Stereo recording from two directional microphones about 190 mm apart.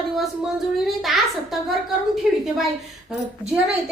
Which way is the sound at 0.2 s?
Centre (ahead or behind).